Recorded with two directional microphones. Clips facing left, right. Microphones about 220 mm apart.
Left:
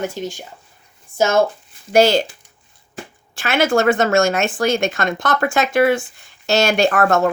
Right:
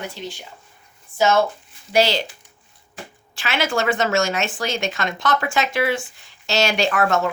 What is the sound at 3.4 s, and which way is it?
Speech, 50° left (ahead or behind).